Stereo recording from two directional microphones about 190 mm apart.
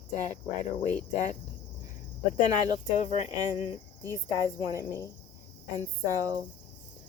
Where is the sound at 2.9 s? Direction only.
35° left (ahead or behind).